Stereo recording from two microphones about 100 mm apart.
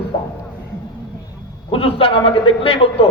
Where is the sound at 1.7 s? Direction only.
65° left (ahead or behind).